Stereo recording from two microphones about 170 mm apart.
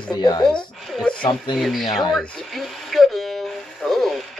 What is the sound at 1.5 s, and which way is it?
Speech, centre (ahead or behind).